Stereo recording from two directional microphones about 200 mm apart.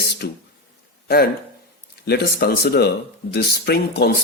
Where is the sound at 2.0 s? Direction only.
50° left (ahead or behind).